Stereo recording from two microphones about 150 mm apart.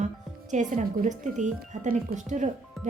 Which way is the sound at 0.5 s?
55° right (ahead or behind).